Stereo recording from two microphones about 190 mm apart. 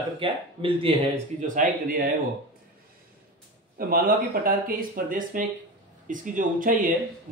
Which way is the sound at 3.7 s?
50° right (ahead or behind).